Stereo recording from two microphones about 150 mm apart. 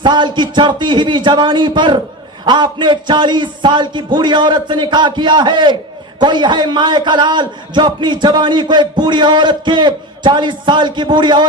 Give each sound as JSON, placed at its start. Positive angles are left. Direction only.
{"t": 0.0, "sound": "a man's voice", "side_deg": -30}